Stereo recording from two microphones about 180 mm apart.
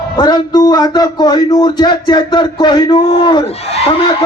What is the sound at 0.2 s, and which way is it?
Speech, 25° left (ahead or behind).